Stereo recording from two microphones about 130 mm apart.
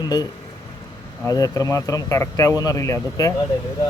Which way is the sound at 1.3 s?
25° left (ahead or behind).